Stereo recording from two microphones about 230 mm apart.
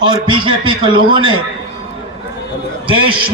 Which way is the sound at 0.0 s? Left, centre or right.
Right.